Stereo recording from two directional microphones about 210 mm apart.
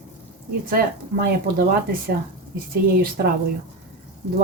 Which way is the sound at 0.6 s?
45° right (ahead or behind).